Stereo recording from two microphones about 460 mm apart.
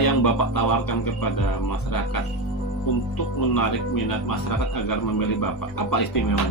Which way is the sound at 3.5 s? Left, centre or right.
Left.